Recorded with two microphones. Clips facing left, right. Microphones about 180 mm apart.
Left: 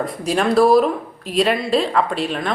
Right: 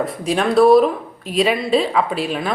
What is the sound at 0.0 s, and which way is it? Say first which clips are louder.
Speech: even; centre (ahead or behind).